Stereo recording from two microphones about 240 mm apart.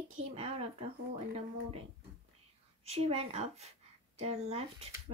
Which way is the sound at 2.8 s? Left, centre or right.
Right.